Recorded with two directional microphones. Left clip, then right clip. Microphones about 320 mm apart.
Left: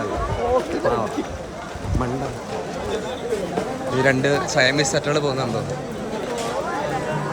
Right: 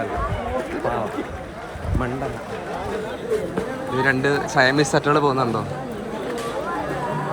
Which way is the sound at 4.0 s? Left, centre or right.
Centre.